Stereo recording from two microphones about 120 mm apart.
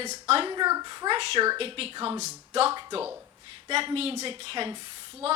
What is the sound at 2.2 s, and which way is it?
A woman's voice, 65° right (ahead or behind).